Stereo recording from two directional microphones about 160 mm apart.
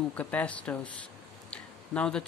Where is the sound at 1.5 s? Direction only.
5° left (ahead or behind).